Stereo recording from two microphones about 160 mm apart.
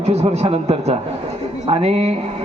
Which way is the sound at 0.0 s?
40° right (ahead or behind).